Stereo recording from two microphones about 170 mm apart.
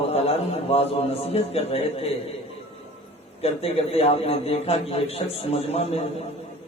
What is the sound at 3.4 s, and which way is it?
Speech, 35° left (ahead or behind).